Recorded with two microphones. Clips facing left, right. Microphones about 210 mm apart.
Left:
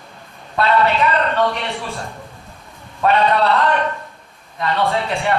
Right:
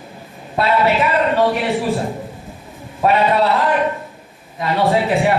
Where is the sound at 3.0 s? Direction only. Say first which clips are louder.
Right 1 dB; 5° right (ahead or behind).